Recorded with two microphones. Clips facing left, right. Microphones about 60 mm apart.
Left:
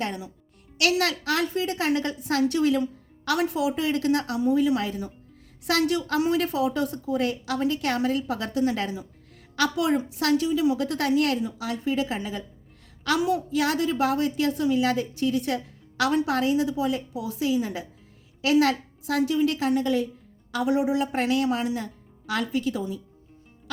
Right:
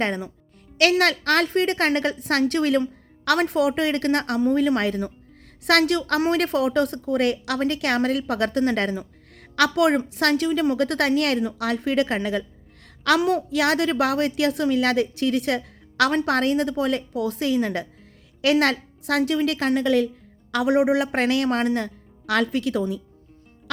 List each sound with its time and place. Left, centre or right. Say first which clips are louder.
0.0 s a woman's voice: right 5 dB; right
20.5 s a woman's voice: right 4 dB; right